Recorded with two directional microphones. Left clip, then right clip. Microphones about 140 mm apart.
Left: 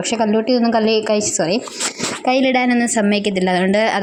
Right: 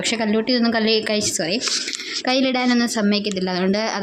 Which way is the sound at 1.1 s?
15° left (ahead or behind).